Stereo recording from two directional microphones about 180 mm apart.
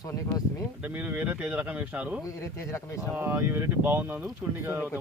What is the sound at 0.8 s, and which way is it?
Speech, 10° right (ahead or behind).